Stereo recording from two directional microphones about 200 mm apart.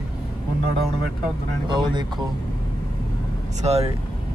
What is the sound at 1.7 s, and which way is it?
Speech, 25° right (ahead or behind).